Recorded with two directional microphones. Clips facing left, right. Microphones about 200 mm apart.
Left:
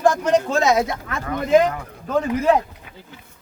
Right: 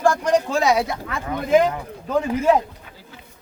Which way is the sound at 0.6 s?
10° right (ahead or behind).